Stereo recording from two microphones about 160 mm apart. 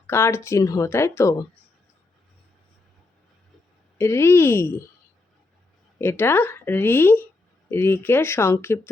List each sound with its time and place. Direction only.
0.1 s speech: 15° left (ahead or behind)
3.9 s speech: 15° left (ahead or behind)
6.0 s speech: 15° left (ahead or behind)